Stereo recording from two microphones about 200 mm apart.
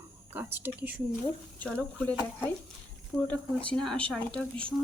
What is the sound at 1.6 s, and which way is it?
Speech, 5° left (ahead or behind).